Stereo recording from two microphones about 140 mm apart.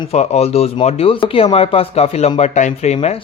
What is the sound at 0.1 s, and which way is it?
Speech, 50° left (ahead or behind).